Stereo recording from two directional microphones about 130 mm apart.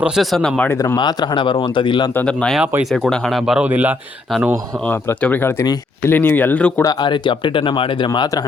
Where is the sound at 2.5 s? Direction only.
10° right (ahead or behind).